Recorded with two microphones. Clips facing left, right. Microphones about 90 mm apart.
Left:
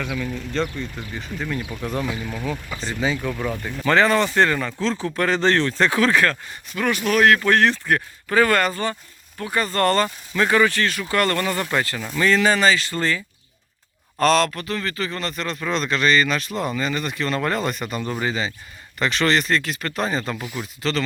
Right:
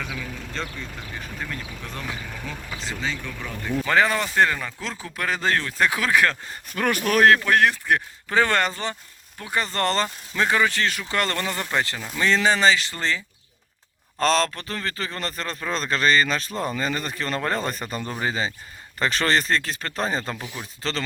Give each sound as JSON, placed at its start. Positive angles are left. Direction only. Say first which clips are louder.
{"t": 0.2, "sound": "a man's voice", "louder": "left 7 dB", "side_deg": 0}
{"t": 1.5, "sound": "speech", "louder": "left 7 dB", "side_deg": 10}
{"t": 3.8, "sound": "speech", "louder": "left 5 dB", "side_deg": -10}
{"t": 6.5, "sound": "speech", "louder": "left 1 dB", "side_deg": -45}
{"t": 7.3, "sound": "a man's voice", "louder": "left 2 dB", "side_deg": -10}